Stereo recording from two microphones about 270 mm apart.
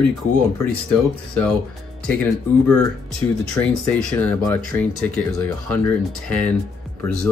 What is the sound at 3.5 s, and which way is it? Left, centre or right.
Speech, centre.